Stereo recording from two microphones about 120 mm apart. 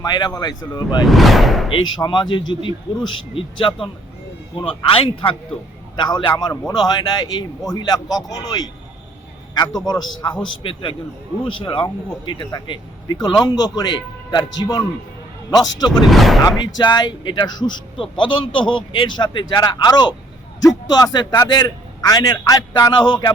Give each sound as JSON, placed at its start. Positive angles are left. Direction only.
{"t": 0.0, "sound": "a man's voice", "side_deg": 35}
{"t": 1.0, "sound": "speech", "side_deg": 0}
{"t": 2.0, "sound": "a man's voice", "side_deg": 40}
{"t": 16.0, "sound": "speech", "side_deg": 0}
{"t": 16.6, "sound": "a man's voice", "side_deg": 40}